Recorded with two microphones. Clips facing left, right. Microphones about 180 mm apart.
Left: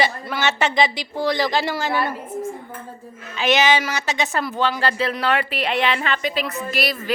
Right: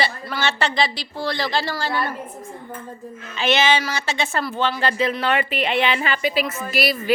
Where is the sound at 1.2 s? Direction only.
15° left (ahead or behind).